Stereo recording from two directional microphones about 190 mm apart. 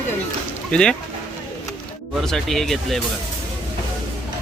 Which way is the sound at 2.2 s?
Centre (ahead or behind).